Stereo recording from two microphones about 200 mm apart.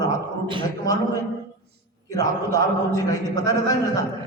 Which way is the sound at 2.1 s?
15° left (ahead or behind).